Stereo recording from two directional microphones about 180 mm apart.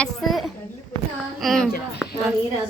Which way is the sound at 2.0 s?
Centre (ahead or behind).